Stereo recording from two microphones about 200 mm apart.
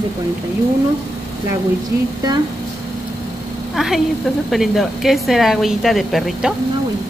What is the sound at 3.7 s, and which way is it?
A woman's voice, centre (ahead or behind).